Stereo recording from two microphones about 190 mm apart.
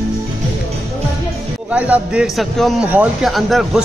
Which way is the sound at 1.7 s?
5° right (ahead or behind).